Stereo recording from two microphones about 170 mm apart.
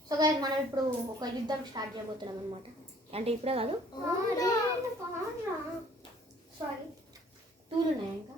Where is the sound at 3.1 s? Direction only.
35° right (ahead or behind).